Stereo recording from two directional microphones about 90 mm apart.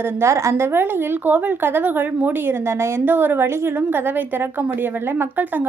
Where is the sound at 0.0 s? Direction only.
30° right (ahead or behind).